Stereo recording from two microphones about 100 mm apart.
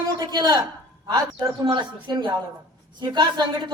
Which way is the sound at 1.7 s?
50° right (ahead or behind).